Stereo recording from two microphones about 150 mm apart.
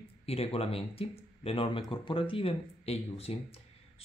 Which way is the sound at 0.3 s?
40° left (ahead or behind).